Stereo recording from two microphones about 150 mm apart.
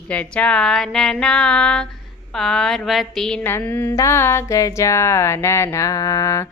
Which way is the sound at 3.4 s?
15° left (ahead or behind).